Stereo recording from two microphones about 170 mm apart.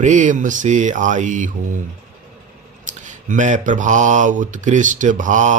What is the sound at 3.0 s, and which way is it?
Speech, 45° right (ahead or behind).